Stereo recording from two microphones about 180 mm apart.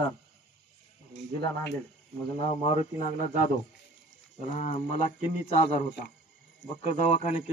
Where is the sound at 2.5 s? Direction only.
35° left (ahead or behind).